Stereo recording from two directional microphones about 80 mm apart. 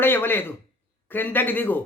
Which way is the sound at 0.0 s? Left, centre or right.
Left.